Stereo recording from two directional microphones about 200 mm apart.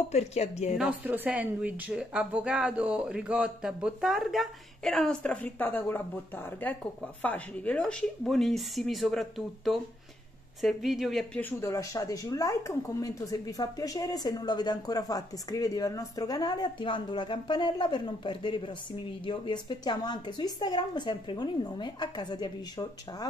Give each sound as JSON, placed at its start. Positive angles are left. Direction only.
{"t": 0.1, "sound": "a woman's voice", "side_deg": 35}
{"t": 0.7, "sound": "a woman's voice", "side_deg": -5}